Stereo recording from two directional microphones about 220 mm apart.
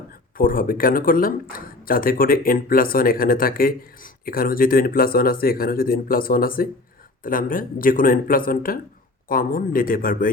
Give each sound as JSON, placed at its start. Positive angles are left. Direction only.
{"t": 0.1, "sound": "speech", "side_deg": 40}